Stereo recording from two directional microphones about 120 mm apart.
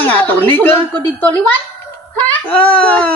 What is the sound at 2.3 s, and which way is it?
Speech, 10° left (ahead or behind).